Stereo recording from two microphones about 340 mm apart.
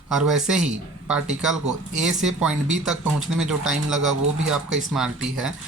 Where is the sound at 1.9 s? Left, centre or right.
Centre.